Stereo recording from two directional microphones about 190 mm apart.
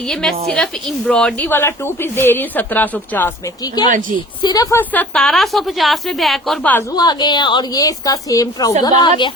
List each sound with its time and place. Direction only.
0.1 s a woman's voice: centre (ahead or behind)
3.8 s a woman's voice: 20° left (ahead or behind)
6.9 s a woman's voice: 20° left (ahead or behind)